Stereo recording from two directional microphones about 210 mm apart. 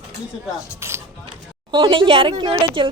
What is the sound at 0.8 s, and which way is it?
Music, 10° right (ahead or behind).